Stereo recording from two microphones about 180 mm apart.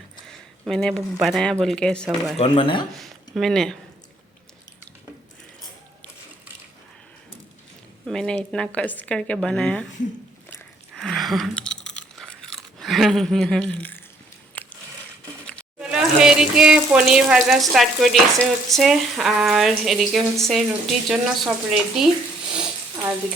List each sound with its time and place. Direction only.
0.3 s speech: centre (ahead or behind)
2.4 s speech: 30° left (ahead or behind)
3.0 s speech: centre (ahead or behind)
8.0 s speech: 5° left (ahead or behind)
10.9 s crunch: centre (ahead or behind)
14.5 s a sound: 10° left (ahead or behind)
15.4 s speech: 5° right (ahead or behind)